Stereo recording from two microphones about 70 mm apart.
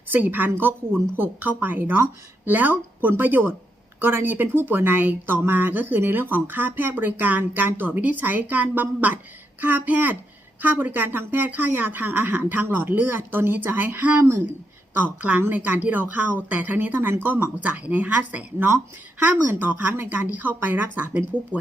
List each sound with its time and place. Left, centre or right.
0.1 s speech: right
14.2 s speech: right
14.9 s speech: right